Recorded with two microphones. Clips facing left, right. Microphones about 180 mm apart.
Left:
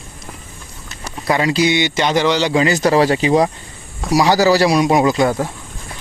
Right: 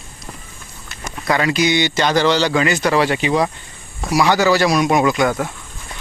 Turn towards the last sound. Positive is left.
turn(degrees=30)  # may be behind; listen again after turning